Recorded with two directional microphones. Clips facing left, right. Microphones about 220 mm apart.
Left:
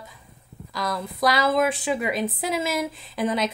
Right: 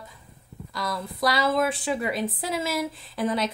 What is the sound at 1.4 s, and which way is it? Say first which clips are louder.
Speech: left 2 dB; 20° left (ahead or behind).